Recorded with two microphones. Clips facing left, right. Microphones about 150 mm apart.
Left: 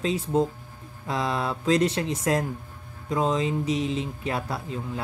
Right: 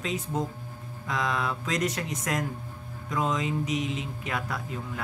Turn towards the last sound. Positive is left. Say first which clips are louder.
# left 3 dB
turn(degrees=30)  # may be behind; listen again after turning